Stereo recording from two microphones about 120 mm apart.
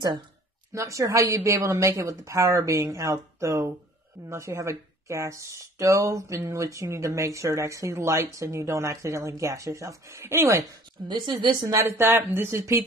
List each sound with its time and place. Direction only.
0.7 s speech: 25° right (ahead or behind)
11.1 s speech: 40° right (ahead or behind)